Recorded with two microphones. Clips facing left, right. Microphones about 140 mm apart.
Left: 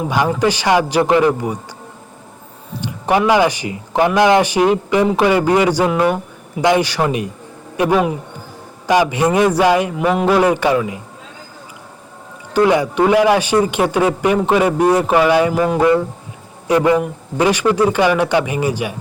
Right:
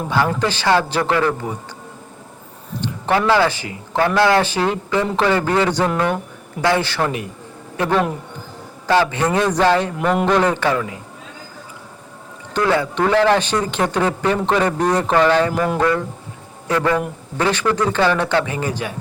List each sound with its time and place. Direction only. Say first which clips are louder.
0.0 s a man's voice: left 3 dB; 10° left (ahead or behind)
2.8 s a man's voice: left 3 dB; 15° left (ahead or behind)
12.5 s a man's voice: left 5 dB; 15° left (ahead or behind)